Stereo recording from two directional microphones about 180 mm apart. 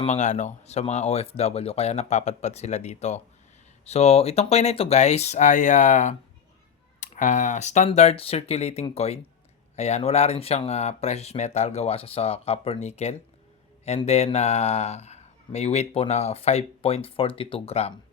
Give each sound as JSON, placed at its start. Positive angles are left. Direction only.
{"t": 0.0, "sound": "speech", "side_deg": 40}